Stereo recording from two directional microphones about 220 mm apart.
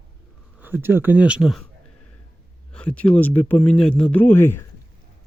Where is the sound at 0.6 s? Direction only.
10° right (ahead or behind).